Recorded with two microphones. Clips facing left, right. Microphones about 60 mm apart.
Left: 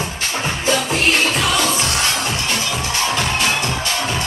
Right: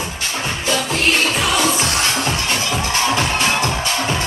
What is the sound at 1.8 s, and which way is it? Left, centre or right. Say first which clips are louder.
Music: right 1 dB; right.